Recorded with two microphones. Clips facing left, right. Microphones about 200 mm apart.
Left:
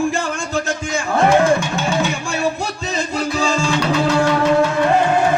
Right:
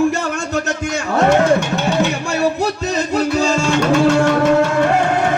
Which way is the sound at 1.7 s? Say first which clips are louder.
Right 3 dB; 40° right (ahead or behind).